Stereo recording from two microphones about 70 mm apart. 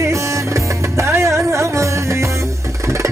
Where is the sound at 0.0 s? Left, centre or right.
Right.